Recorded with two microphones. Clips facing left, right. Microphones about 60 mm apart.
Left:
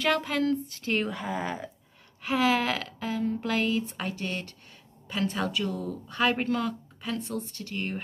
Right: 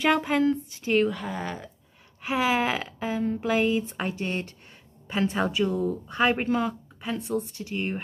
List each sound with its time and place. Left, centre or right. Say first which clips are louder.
0.0 s speech: right 4 dB; right
0.9 s speech: right 5 dB; centre
2.2 s speech: right 1 dB; centre